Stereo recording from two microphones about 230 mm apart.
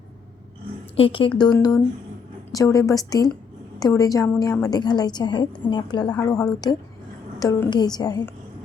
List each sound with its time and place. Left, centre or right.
0.9 s a woman's voice: left